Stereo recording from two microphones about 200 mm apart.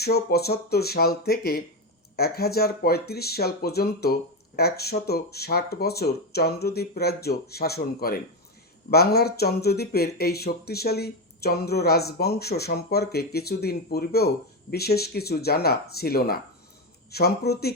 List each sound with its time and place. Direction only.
0.0 s speech: 55° left (ahead or behind)